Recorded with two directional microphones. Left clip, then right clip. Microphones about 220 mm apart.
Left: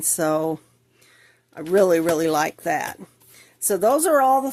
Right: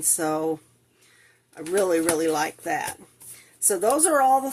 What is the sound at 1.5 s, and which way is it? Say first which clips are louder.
Speech: left 5 dB; 45° left (ahead or behind).